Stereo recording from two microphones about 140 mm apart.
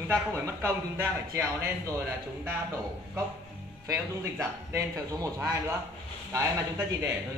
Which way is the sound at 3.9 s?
20° right (ahead or behind).